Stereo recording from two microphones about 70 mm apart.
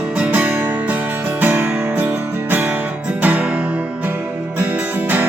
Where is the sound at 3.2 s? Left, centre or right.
Right.